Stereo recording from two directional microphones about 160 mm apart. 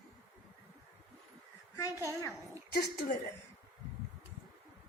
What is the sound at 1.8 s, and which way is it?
Speech, 20° left (ahead or behind).